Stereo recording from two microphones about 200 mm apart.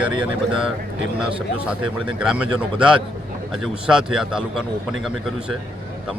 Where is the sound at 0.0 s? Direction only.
5° right (ahead or behind).